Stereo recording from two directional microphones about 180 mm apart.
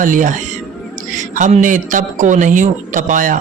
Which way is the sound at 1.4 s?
45° right (ahead or behind).